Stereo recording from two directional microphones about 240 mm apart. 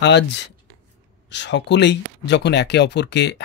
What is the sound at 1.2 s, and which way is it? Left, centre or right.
Speech, left.